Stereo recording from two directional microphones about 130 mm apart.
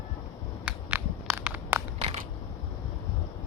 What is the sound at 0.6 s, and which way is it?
Crushing, 10° right (ahead or behind).